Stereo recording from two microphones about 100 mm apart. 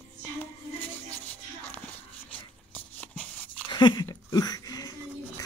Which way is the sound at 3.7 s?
50° left (ahead or behind).